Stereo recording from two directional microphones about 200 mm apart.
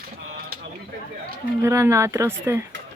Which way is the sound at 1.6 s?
15° right (ahead or behind).